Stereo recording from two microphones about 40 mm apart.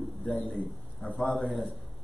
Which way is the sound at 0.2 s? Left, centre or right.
Centre.